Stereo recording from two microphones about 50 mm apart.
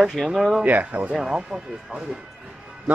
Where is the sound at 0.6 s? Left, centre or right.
Right.